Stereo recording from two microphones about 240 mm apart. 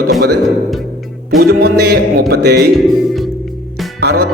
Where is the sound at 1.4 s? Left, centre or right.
Right.